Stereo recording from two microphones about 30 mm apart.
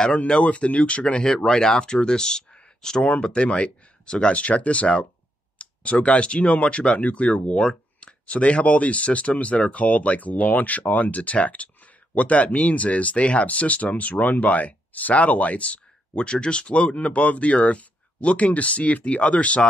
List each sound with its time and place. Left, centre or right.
0.3 s speech: left
1.2 s speech: centre
3.2 s speech: left
4.3 s speech: left
5.6 s clicking: left
6.1 s speech: left
14.2 s speech: left
16.2 s speech: left
16.9 s speech: left